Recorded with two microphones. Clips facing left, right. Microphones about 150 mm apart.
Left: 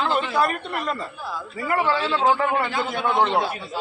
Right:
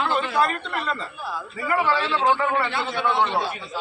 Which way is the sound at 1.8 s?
35° left (ahead or behind).